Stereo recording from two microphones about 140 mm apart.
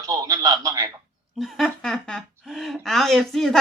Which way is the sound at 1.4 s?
5° left (ahead or behind).